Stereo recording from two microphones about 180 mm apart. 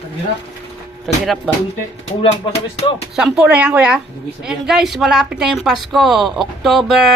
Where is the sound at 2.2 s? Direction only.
30° left (ahead or behind).